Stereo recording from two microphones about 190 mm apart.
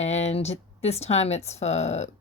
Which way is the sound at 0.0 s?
35° left (ahead or behind).